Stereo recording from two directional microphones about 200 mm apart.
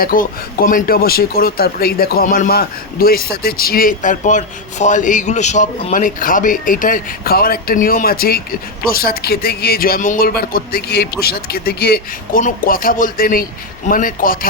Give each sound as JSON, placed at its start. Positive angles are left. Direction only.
{"t": 0.0, "sound": "speech", "side_deg": 45}